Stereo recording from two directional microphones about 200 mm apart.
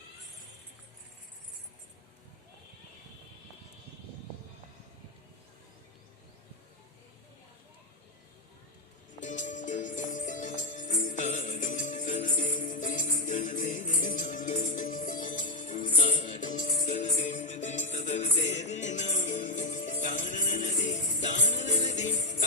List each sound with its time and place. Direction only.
9.2 s music: 40° left (ahead or behind)